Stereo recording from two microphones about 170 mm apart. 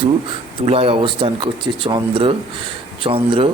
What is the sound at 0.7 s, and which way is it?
Speech, 35° right (ahead or behind).